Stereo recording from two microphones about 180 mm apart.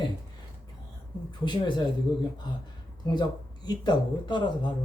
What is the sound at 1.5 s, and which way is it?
Speech, 25° left (ahead or behind).